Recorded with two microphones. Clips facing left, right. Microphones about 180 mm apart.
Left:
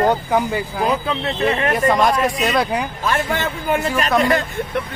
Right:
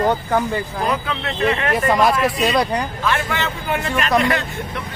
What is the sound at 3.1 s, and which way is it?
A man's voice, 45° left (ahead or behind).